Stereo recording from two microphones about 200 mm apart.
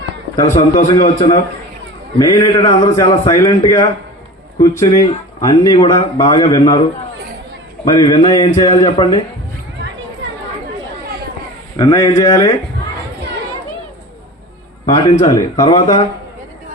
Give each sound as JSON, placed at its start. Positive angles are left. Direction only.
{"t": 0.9, "sound": "speech", "side_deg": 20}
{"t": 7.9, "sound": "speech", "side_deg": 20}
{"t": 11.8, "sound": "speech", "side_deg": 20}
{"t": 14.8, "sound": "speech", "side_deg": 15}